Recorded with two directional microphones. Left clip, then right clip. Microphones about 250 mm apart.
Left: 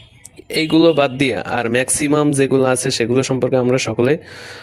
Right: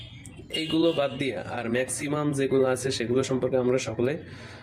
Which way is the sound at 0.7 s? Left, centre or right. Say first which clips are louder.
Left 11 dB; left.